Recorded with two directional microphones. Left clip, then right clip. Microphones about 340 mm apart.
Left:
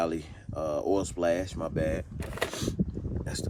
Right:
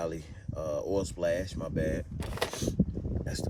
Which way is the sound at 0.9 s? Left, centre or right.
Centre.